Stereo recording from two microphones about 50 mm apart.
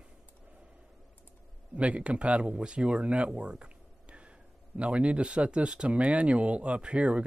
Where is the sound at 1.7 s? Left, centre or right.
Right.